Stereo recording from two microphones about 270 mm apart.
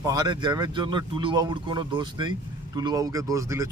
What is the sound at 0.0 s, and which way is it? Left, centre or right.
Speech, centre.